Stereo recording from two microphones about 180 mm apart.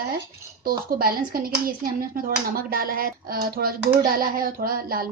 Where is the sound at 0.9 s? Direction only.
55° right (ahead or behind).